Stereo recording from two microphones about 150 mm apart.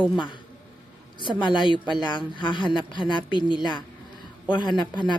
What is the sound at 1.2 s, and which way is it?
Speech, 30° left (ahead or behind).